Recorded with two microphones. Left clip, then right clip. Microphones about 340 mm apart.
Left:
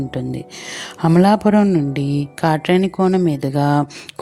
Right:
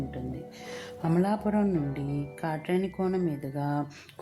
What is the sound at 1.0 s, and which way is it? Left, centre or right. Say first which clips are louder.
A woman's voice: left 14 dB; right.